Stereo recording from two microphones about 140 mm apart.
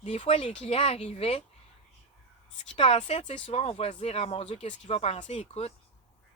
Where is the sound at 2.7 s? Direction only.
45° left (ahead or behind).